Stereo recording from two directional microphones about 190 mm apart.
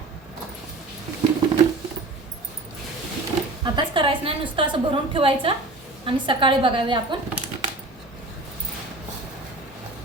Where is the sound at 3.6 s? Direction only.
25° right (ahead or behind).